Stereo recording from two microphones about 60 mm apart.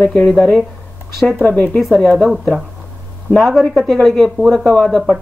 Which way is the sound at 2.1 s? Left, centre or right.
Centre.